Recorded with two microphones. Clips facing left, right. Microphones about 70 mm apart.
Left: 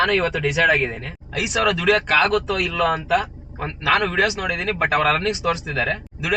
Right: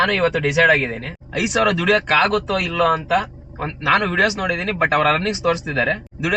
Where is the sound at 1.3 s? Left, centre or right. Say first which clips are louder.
Right 3 dB; centre.